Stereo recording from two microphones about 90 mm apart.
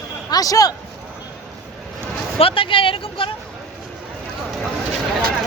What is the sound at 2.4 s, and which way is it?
Speech, 85° left.